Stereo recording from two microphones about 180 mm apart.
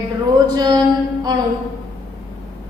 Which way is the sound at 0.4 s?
25° right (ahead or behind).